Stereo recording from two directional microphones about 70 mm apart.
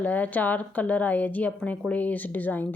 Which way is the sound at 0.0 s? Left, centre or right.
Left.